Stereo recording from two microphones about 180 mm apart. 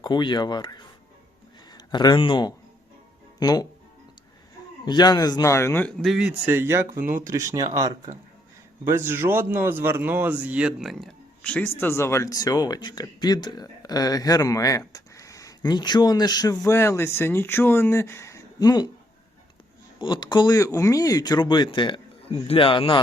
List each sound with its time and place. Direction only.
0.0 s speech: 25° left (ahead or behind)
4.9 s speech: 25° left (ahead or behind)
6.0 s a man's voice: 5° right (ahead or behind); by 18.9 s 20° left (ahead or behind)
20.0 s speech: 25° left (ahead or behind)